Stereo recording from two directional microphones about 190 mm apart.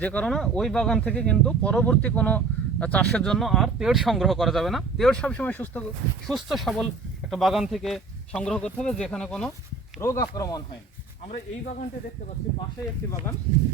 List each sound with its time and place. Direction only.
0.0 s speech: 10° left (ahead or behind)
10.0 s speech: 15° left (ahead or behind)